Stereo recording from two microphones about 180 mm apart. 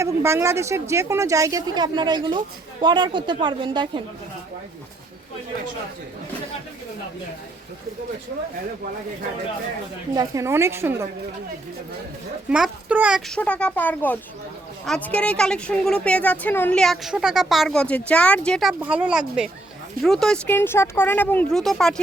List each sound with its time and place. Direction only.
0.0 s speech: 15° right (ahead or behind)
10.2 s speech: 15° right (ahead or behind)
12.5 s a woman's voice: 5° right (ahead or behind)